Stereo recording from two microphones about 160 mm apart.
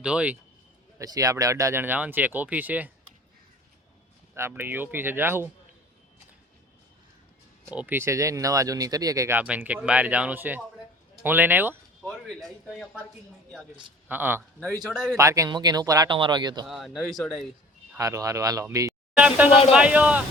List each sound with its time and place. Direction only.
0.0 s speech: 5° right (ahead or behind)
0.9 s speech: 20° right (ahead or behind)
4.4 s speech: 15° right (ahead or behind)
7.7 s speech: 10° right (ahead or behind)
12.0 s speech: centre (ahead or behind)
14.1 s speech: 10° right (ahead or behind)
15.2 s speech: 20° right (ahead or behind)
16.6 s speech: centre (ahead or behind)
17.9 s speech: 20° right (ahead or behind)
19.1 s speech: 10° right (ahead or behind)